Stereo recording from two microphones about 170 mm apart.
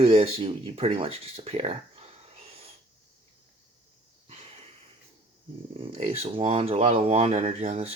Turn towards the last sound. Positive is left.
turn(degrees=-40)  # may be behind; listen again after turning